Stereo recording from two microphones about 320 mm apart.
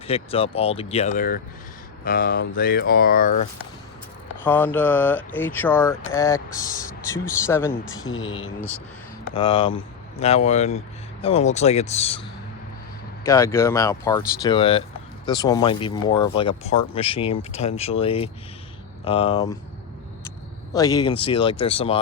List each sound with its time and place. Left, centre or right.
0.1 s speech: centre
4.4 s speech: centre
8.0 s speech: left
9.3 s speech: centre
13.2 s speech: centre
20.7 s speech: centre